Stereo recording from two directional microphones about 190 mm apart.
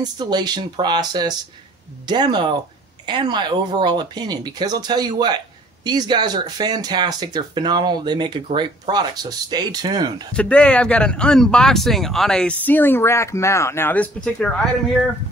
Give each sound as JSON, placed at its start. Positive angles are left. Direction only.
{"t": 0.0, "sound": "speech", "side_deg": -20}
{"t": 10.3, "sound": "speech", "side_deg": 5}